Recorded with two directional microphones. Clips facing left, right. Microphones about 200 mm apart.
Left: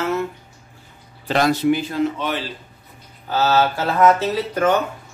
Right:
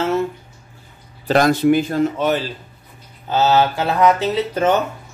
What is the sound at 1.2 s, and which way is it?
Speech, 45° right (ahead or behind).